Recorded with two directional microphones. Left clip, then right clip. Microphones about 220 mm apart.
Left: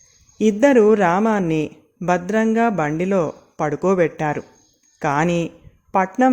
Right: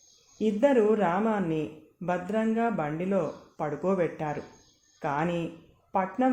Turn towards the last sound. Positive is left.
turn(degrees=45)  # may be behind; listen again after turning